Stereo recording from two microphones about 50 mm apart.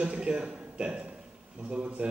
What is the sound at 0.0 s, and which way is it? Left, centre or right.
A man's voice, right.